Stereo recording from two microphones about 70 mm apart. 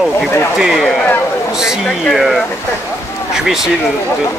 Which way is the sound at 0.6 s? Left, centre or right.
Centre.